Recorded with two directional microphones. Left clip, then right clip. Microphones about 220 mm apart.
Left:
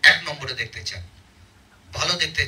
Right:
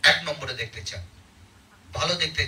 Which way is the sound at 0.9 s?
40° left (ahead or behind).